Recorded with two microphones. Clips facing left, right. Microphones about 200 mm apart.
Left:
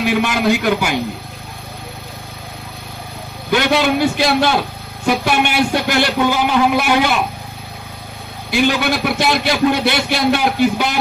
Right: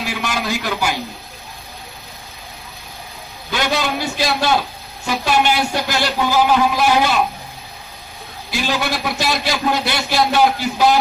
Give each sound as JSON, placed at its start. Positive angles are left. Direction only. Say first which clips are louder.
{"t": 0.0, "sound": "a man's voice", "louder": "left 8 dB", "side_deg": 55}
{"t": 3.4, "sound": "a man's voice", "louder": "left 6 dB", "side_deg": 55}
{"t": 8.5, "sound": "a man's voice", "louder": "left 6 dB", "side_deg": 60}